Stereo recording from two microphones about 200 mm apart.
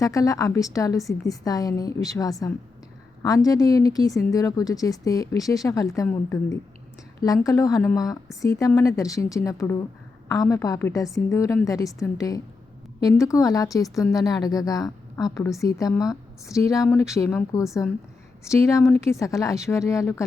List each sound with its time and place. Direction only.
0.0 s a woman's voice: 15° left (ahead or behind)